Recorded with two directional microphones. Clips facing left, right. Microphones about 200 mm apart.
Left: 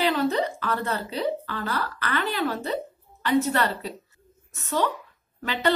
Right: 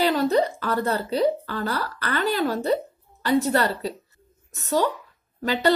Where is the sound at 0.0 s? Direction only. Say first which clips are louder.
Right 3 dB; 40° right (ahead or behind).